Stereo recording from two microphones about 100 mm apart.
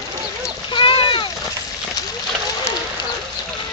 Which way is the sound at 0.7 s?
55° left (ahead or behind).